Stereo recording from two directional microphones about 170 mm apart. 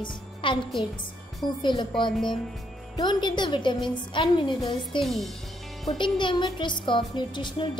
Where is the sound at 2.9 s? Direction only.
25° left (ahead or behind).